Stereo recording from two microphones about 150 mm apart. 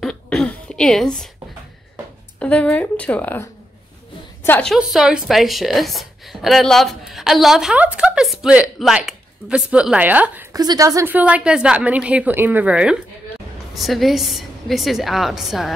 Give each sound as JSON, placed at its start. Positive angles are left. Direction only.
{"t": 0.0, "sound": "throat clearing", "side_deg": 0}
{"t": 2.3, "sound": "a woman's voice", "side_deg": 10}
{"t": 4.7, "sound": "a woman's voice", "side_deg": -5}
{"t": 10.5, "sound": "a woman's voice", "side_deg": -25}
{"t": 11.1, "sound": "a woman's voice", "side_deg": -10}